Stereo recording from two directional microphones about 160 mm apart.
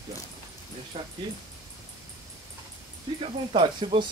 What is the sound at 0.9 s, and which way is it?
Speech, 40° right (ahead or behind).